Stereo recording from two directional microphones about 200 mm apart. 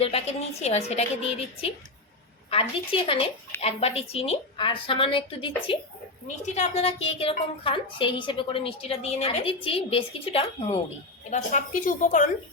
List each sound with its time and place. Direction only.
0.0 s a woman's voice: 30° left (ahead or behind)
6.2 s a woman's voice: 35° left (ahead or behind)
11.3 s a woman's voice: 40° left (ahead or behind)